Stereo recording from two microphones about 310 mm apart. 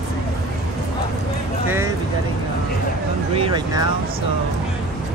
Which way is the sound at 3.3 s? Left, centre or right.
Centre.